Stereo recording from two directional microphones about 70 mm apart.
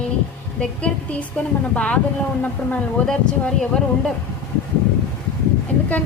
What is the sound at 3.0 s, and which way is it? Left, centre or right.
Speech, centre.